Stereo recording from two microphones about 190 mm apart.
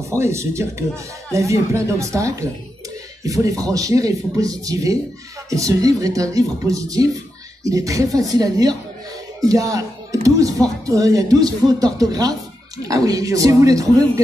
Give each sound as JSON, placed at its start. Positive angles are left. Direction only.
{"t": 0.1, "sound": "a woman's voice", "side_deg": -15}